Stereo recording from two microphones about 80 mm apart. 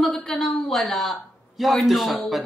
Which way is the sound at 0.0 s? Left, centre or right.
Centre.